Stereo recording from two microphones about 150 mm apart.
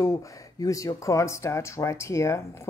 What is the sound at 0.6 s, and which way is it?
A woman's voice, 25° left (ahead or behind).